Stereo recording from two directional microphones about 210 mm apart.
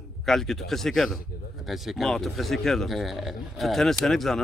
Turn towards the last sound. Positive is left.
turn(degrees=0)  # may be behind; listen again after turning